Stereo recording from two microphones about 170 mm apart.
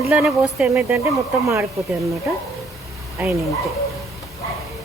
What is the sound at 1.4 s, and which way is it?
Speech, 20° right (ahead or behind).